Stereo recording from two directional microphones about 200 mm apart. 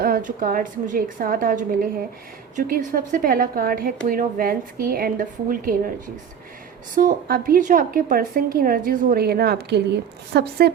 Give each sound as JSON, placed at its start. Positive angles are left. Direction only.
{"t": 0.0, "sound": "a woman's voice", "side_deg": -45}
{"t": 6.9, "sound": "a woman's voice", "side_deg": -40}